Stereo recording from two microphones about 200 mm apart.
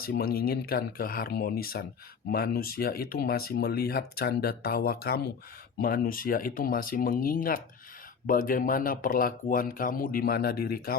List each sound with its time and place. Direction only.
0.0 s speech: 50° left (ahead or behind)